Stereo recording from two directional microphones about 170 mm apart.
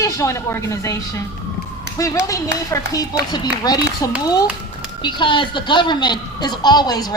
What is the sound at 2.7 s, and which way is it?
A woman's voice, 20° left (ahead or behind).